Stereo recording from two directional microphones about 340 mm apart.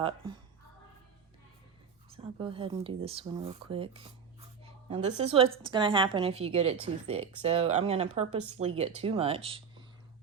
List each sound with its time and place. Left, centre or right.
2.0 s speech: centre